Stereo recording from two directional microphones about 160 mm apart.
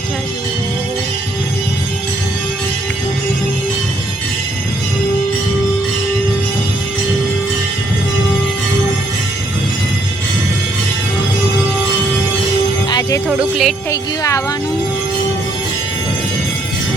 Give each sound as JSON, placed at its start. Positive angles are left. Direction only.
{"t": 12.9, "sound": "music", "side_deg": 20}
{"t": 13.2, "sound": "music", "side_deg": 0}
{"t": 13.9, "sound": "speech", "side_deg": 20}